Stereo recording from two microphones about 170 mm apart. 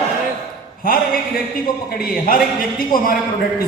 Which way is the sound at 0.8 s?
60° left (ahead or behind).